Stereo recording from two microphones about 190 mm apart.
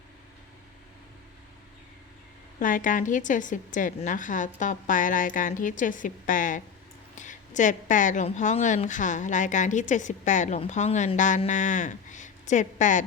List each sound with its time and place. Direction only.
2.6 s a woman's voice: 45° left (ahead or behind)